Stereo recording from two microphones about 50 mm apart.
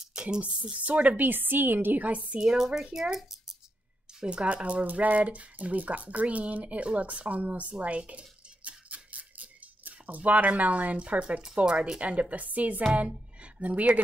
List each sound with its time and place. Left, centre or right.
0.1 s a woman's voice: centre
2.8 s speech: centre
4.2 s a woman's voice: centre